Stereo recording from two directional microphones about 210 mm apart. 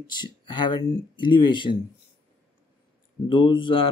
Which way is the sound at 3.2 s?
20° left (ahead or behind).